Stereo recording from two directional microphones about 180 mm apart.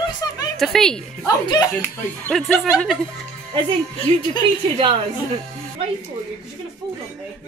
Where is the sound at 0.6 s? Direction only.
Centre (ahead or behind).